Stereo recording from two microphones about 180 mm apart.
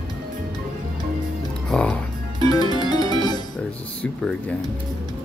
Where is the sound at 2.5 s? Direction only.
25° left (ahead or behind).